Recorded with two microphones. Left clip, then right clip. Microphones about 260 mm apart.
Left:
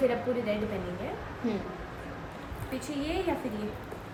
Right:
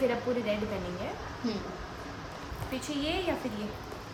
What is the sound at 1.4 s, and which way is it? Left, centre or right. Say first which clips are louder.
Speech: left 2 dB; right.